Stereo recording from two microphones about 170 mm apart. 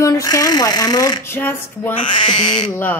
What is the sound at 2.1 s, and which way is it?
Speech, 30° left (ahead or behind).